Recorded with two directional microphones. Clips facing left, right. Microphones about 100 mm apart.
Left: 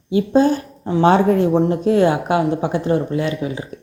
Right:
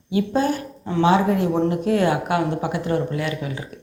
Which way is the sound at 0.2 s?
20° left (ahead or behind).